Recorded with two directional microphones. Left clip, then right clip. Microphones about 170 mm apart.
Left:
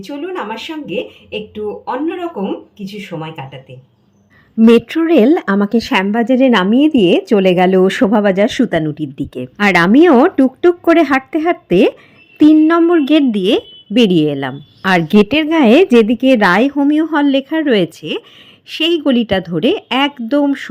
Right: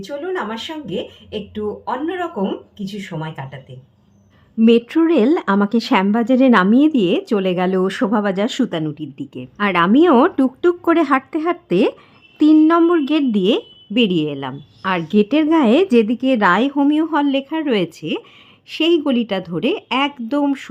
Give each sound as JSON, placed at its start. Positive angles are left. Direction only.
{"t": 0.0, "sound": "speech", "side_deg": 5}
{"t": 4.9, "sound": "a woman's voice", "side_deg": 15}
{"t": 8.9, "sound": "a woman's voice", "side_deg": 25}